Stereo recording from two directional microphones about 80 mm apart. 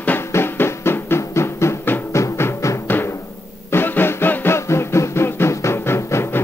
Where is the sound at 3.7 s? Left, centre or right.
Left.